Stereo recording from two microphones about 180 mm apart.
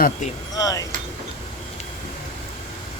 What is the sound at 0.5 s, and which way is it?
Speech, 20° left (ahead or behind).